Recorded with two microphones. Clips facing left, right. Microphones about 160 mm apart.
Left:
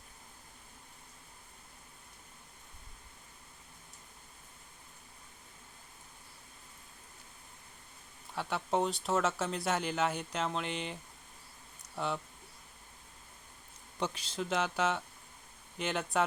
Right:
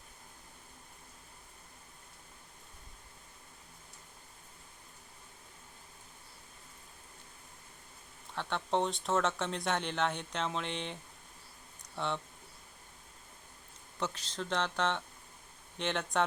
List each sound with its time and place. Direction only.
8.4 s speech: 5° left (ahead or behind)
14.0 s speech: 10° left (ahead or behind)